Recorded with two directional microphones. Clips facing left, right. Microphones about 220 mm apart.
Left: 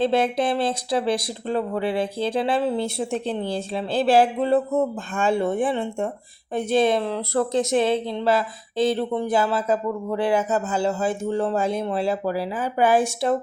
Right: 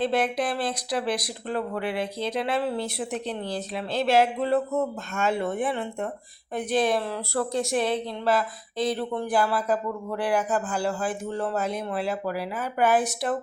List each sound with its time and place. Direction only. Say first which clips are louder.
0.0 s speech: left 4 dB; 25° left (ahead or behind)